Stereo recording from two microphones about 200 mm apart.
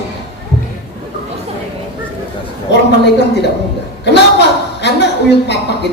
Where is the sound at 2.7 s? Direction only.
60° left (ahead or behind).